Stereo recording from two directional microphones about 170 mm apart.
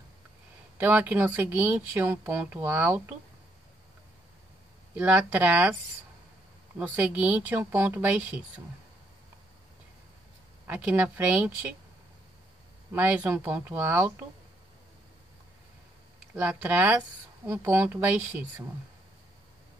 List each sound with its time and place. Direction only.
0.7 s speech: 10° right (ahead or behind)
4.9 s speech: 10° right (ahead or behind)
6.8 s speech: 10° right (ahead or behind)
10.7 s speech: 5° right (ahead or behind)
12.9 s speech: 10° right (ahead or behind)
16.3 s speech: 10° right (ahead or behind)